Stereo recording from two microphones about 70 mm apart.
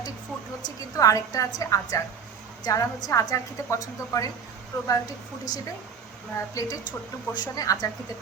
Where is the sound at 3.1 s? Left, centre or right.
Left.